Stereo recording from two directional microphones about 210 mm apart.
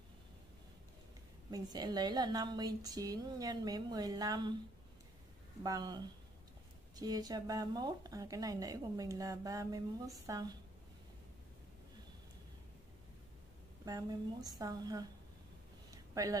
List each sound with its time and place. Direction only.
1.5 s speech: 20° right (ahead or behind)
5.6 s speech: 20° right (ahead or behind)
13.8 s speech: 15° right (ahead or behind)
15.9 s a sound: 15° right (ahead or behind)